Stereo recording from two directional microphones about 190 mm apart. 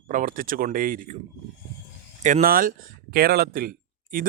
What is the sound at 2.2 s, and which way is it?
Speech, 45° right (ahead or behind).